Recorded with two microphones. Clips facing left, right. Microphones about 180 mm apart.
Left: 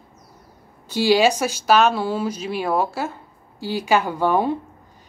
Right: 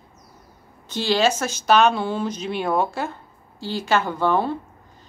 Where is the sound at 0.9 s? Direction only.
10° left (ahead or behind).